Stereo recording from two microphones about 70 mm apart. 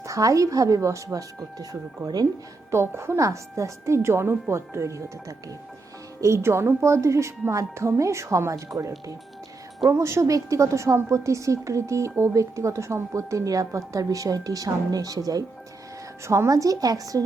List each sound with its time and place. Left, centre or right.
0.0 s a woman's voice: right
2.6 s speech: right
3.2 s a woman's voice: right
9.9 s a woman's voice: right
16.2 s a woman's voice: right